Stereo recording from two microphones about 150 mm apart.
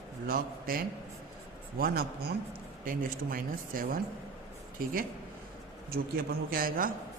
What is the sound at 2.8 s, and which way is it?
A man's voice, 70° right (ahead or behind).